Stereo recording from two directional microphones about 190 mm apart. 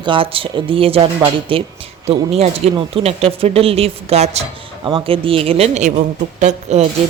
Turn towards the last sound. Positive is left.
turn(degrees=-35)  # may be behind; listen again after turning